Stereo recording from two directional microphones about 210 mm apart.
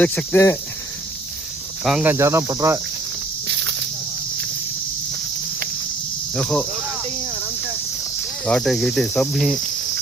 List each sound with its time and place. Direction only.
0.0 s cricket: 10° left (ahead or behind)
1.8 s speech: 5° right (ahead or behind)
3.4 s snake: 60° right (ahead or behind)
6.3 s cricket: centre (ahead or behind)
8.4 s cricket: centre (ahead or behind)